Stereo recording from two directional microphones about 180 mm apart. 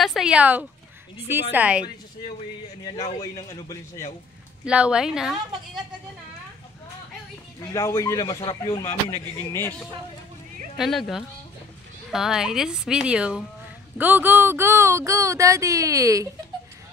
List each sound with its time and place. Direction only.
0.0 s speech: centre (ahead or behind)
2.8 s a man's voice: 25° left (ahead or behind)
4.6 s a woman's voice: 5° right (ahead or behind)
7.7 s a man's voice: 15° left (ahead or behind)
8.8 s speech: 15° left (ahead or behind)
10.8 s a woman's voice: centre (ahead or behind); by 16.3 s 20° right (ahead or behind)